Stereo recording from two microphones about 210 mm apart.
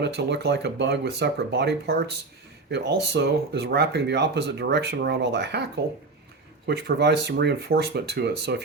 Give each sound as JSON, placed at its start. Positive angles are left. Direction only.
{"t": 0.0, "sound": "speech", "side_deg": -55}